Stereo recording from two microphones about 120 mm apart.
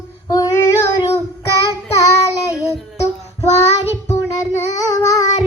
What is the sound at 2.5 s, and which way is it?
Child singing, 25° left (ahead or behind).